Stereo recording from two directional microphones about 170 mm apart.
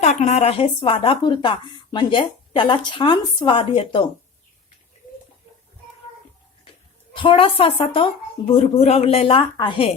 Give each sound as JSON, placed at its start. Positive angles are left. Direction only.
{"t": 0.0, "sound": "speech", "side_deg": 45}
{"t": 7.2, "sound": "speech", "side_deg": 30}